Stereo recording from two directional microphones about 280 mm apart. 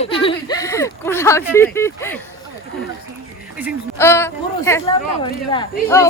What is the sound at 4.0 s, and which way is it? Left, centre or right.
Speech, centre.